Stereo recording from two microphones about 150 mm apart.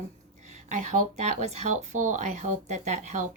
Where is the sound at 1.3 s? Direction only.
50° right (ahead or behind).